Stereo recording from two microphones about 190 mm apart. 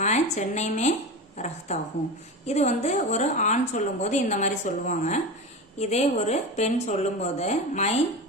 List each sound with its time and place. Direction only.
0.0 s a woman's voice: 35° left (ahead or behind)